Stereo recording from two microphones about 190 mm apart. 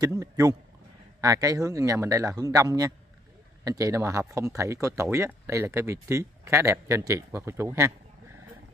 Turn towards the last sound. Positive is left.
turn(degrees=-15)  # may be behind; listen again after turning